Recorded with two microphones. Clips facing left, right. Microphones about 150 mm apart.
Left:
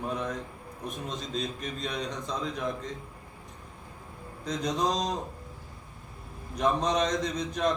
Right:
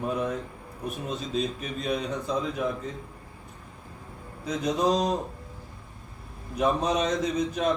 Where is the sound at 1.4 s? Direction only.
5° right (ahead or behind).